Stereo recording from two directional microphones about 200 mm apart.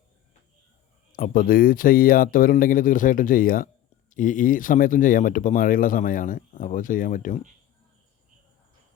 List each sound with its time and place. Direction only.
1.1 s speech: 45° left (ahead or behind)